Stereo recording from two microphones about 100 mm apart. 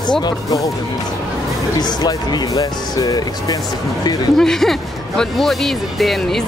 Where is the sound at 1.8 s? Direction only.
45° left (ahead or behind).